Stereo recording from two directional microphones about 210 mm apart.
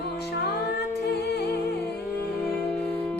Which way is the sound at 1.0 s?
50° left (ahead or behind).